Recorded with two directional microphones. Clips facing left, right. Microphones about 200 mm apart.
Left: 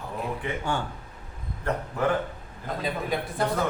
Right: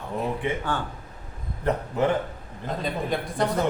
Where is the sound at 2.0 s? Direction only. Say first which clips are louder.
Right 3 dB; 20° right (ahead or behind).